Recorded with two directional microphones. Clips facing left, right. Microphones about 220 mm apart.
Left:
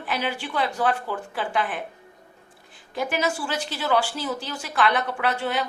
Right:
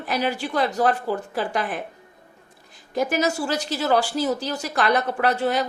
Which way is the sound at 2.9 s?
40° right (ahead or behind).